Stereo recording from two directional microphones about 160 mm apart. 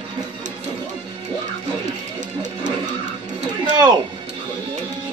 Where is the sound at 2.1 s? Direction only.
50° right (ahead or behind).